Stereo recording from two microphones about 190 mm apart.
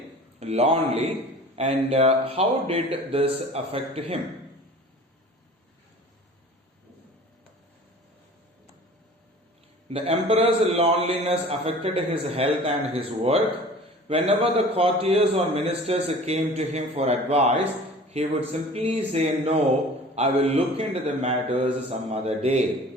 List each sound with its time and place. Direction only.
0.3 s a man's voice: 35° right (ahead or behind)
9.9 s a man's voice: 30° right (ahead or behind)